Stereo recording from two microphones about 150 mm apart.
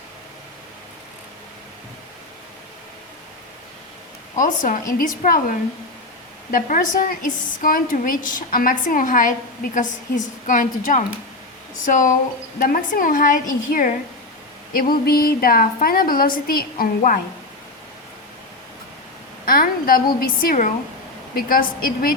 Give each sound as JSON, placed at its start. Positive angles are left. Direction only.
{"t": 4.4, "sound": "a woman's voice", "side_deg": 60}
{"t": 10.4, "sound": "a woman's voice", "side_deg": 60}
{"t": 19.5, "sound": "a woman's voice", "side_deg": 70}